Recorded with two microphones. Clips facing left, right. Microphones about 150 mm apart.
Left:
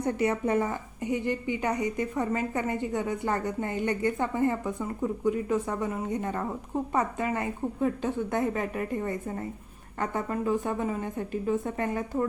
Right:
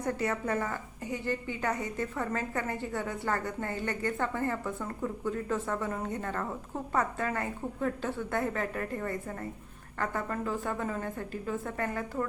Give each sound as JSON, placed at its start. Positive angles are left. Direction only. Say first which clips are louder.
{"t": 0.0, "sound": "a woman's voice", "louder": "left 5 dB", "side_deg": 20}